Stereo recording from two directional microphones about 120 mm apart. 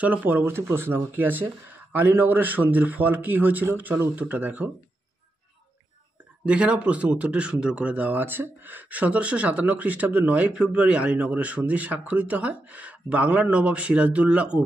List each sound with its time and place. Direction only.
0.0 s speech: 15° right (ahead or behind)
6.4 s speech: 10° right (ahead or behind)